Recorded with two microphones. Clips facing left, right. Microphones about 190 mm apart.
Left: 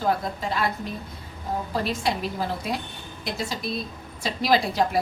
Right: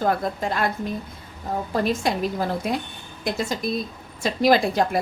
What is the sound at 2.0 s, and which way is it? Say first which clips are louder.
Speech: right 2 dB; 50° right (ahead or behind).